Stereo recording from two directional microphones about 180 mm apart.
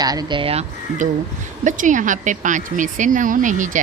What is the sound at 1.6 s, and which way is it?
Speech, 45° right (ahead or behind).